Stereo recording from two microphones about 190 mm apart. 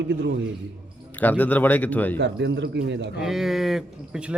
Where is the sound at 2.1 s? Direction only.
65° right (ahead or behind).